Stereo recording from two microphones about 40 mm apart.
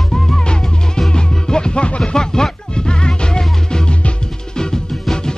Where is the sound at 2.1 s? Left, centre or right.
Centre.